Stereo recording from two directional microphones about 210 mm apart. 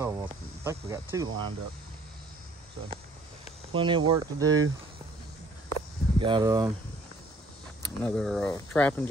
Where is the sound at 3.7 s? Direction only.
25° right (ahead or behind).